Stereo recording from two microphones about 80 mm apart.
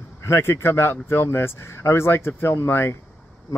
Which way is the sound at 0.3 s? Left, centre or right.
Left.